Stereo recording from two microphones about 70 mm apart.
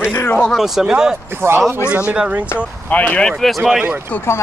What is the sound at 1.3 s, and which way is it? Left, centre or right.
Speech, right.